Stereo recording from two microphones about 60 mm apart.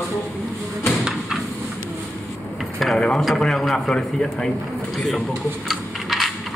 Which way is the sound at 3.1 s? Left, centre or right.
Centre.